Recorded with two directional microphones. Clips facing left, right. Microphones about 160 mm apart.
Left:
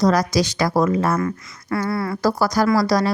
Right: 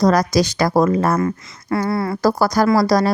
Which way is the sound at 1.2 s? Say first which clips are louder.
Right 3 dB; 25° right (ahead or behind).